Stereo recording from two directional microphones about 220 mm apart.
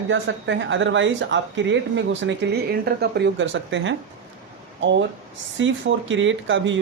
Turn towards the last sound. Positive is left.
turn(degrees=-60)  # may be behind; listen again after turning